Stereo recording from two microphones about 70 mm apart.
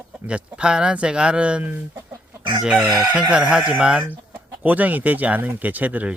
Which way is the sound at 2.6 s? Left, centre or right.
Centre.